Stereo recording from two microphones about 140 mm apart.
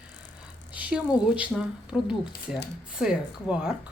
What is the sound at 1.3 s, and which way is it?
Speech, 5° right (ahead or behind).